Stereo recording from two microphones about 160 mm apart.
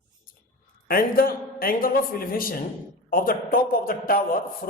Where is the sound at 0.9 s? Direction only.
65° left (ahead or behind).